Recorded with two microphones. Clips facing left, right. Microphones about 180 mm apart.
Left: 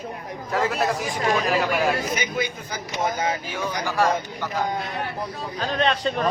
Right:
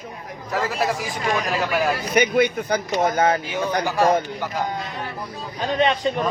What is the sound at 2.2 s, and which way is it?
Speech, 65° right (ahead or behind).